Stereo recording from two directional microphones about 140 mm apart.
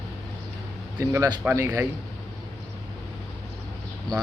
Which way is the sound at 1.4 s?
10° right (ahead or behind).